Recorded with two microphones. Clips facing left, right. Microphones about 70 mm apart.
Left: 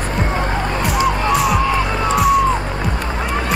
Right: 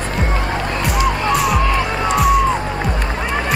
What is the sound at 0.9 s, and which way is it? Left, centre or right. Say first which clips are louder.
Music: left 1 dB; centre.